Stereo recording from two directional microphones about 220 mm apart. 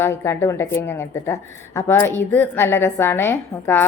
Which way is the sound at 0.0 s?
10° left (ahead or behind).